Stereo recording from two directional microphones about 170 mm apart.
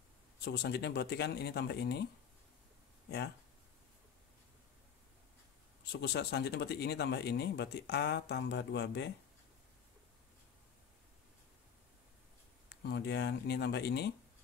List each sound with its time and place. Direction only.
0.5 s speech: 75° left (ahead or behind)
5.9 s speech: 75° left (ahead or behind)
12.8 s speech: 75° left (ahead or behind)